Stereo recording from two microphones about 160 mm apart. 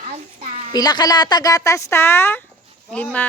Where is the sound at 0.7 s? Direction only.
25° left (ahead or behind).